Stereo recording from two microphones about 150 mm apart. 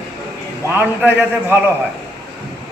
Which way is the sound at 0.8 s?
15° right (ahead or behind).